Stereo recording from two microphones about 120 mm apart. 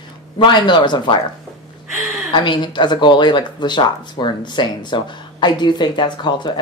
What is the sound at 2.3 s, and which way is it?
Speech, 40° left (ahead or behind).